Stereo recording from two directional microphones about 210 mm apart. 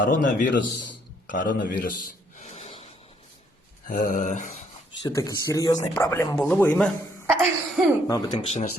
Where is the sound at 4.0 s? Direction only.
40° left (ahead or behind).